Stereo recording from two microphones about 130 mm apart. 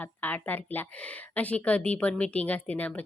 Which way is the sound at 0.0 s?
15° left (ahead or behind).